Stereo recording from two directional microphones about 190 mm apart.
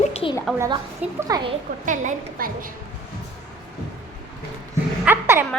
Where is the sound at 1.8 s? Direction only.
40° right (ahead or behind).